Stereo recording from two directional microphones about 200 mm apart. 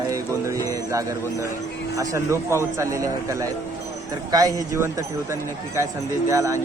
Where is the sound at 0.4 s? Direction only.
15° right (ahead or behind).